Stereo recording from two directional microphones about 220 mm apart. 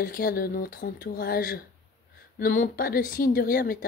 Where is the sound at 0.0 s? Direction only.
40° left (ahead or behind).